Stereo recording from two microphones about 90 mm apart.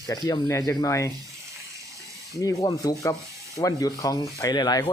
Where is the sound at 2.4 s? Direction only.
45° left (ahead or behind).